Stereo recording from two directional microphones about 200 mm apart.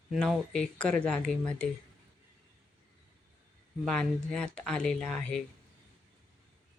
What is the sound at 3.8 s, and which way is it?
Speech, 5° left (ahead or behind).